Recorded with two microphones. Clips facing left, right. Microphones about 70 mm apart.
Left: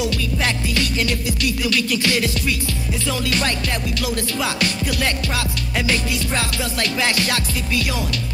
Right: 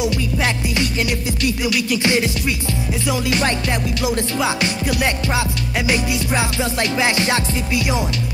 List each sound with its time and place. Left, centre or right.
0.0 s music: centre